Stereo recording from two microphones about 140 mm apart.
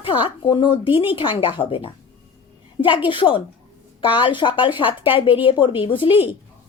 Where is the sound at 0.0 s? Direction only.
35° left (ahead or behind).